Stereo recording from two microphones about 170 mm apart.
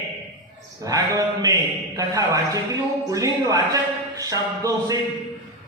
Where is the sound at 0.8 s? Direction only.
20° right (ahead or behind).